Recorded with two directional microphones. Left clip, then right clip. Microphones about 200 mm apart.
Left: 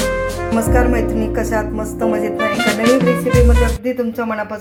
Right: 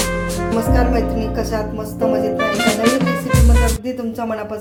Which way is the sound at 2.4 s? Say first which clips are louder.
Left 2 dB; centre (ahead or behind).